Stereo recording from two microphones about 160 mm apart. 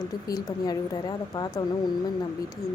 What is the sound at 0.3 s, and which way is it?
Speech, 25° left (ahead or behind).